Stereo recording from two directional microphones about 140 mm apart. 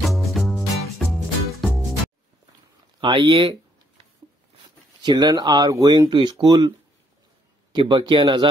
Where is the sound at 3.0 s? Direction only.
35° right (ahead or behind).